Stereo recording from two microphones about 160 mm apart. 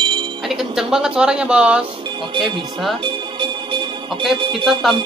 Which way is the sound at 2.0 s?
30° right (ahead or behind).